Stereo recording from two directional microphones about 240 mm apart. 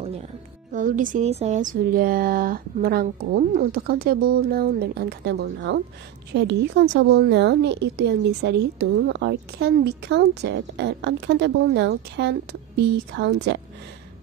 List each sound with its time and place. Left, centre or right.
0.7 s a woman's voice: right